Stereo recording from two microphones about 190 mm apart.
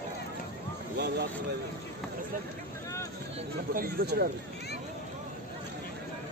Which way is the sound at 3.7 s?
55° right (ahead or behind).